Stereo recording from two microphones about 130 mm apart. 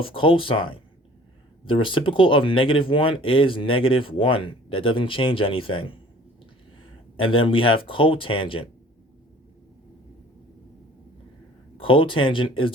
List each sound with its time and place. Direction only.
0.0 s speech: 40° left (ahead or behind)
7.2 s speech: 45° left (ahead or behind)
11.8 s speech: 40° left (ahead or behind)